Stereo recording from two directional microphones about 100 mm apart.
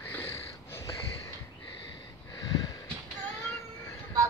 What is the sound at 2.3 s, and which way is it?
Wheeze, 40° left (ahead or behind).